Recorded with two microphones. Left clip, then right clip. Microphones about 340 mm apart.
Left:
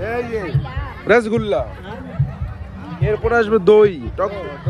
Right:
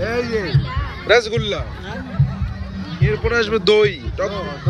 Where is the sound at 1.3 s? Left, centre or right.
Centre.